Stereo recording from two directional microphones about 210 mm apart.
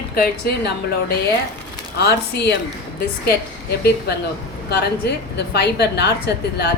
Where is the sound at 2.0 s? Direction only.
50° left (ahead or behind).